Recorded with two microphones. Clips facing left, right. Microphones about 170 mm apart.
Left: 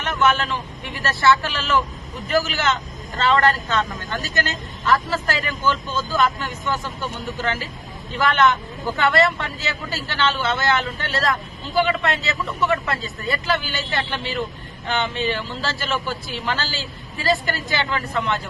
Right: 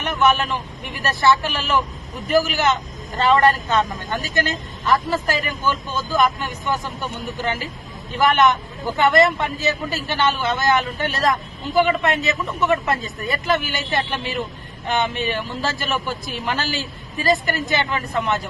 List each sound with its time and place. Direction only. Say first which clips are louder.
0.0 s a man's voice: right 2 dB; 15° right (ahead or behind)